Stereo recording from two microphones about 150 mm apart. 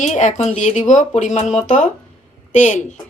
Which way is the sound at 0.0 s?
50° left (ahead or behind).